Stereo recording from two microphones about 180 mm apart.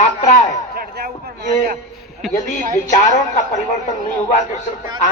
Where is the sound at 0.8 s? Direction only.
55° right (ahead or behind).